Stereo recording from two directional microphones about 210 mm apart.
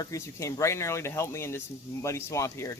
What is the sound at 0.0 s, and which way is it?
Speech, 15° left (ahead or behind).